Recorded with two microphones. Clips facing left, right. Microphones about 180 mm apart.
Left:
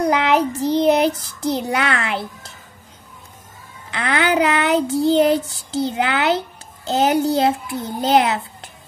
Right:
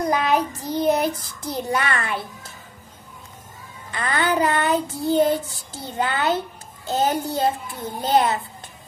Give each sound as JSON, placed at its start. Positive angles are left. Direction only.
{"t": 0.0, "sound": "a child's voice", "side_deg": 75}
{"t": 3.9, "sound": "child singing", "side_deg": 75}